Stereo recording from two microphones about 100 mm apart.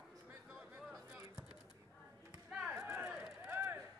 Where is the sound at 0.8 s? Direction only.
Centre (ahead or behind).